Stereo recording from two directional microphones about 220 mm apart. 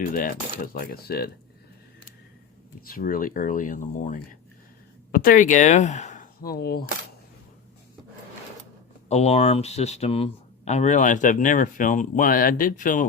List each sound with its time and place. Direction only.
0.0 s speech: 40° left (ahead or behind)
2.8 s speech: 40° left (ahead or behind)
9.0 s speech: 30° left (ahead or behind)